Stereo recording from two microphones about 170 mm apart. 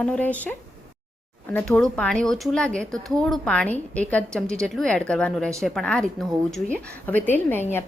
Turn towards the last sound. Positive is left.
turn(degrees=10)  # may be behind; listen again after turning